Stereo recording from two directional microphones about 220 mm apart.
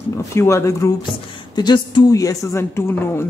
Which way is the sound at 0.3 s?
10° left (ahead or behind).